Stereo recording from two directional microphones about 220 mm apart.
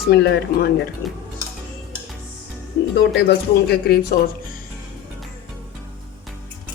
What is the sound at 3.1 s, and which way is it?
Speech, 45° left (ahead or behind).